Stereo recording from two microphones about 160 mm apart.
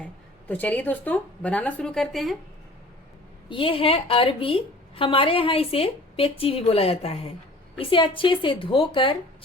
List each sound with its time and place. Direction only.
0.0 s a woman's voice: 10° left (ahead or behind)
3.5 s a woman's voice: 35° left (ahead or behind)